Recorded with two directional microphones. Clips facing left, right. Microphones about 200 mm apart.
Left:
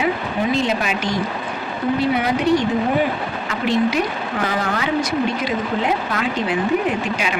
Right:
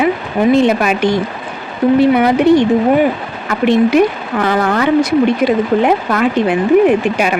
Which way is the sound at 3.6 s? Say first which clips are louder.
Right 9 dB; 60° right (ahead or behind).